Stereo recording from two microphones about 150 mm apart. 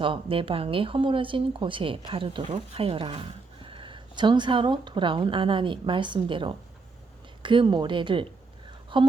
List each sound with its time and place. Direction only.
0.0 s speech: 35° right (ahead or behind)